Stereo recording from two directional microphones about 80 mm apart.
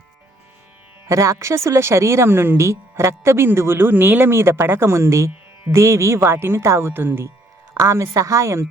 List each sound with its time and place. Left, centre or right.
1.0 s speech: right